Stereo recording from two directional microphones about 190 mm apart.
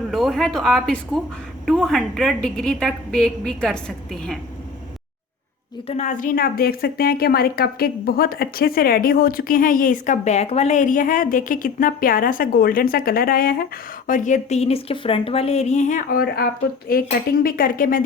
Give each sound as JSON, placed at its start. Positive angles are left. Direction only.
{"t": 0.1, "sound": "a woman's voice", "side_deg": 0}
{"t": 5.9, "sound": "a woman's voice", "side_deg": 40}